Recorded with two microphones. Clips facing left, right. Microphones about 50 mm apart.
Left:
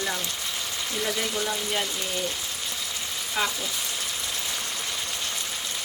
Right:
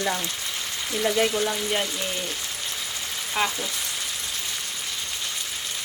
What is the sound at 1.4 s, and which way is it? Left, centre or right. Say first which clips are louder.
Speech: right 3 dB; centre.